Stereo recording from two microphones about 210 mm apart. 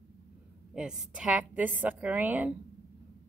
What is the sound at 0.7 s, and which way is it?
A woman's voice, 5° right (ahead or behind).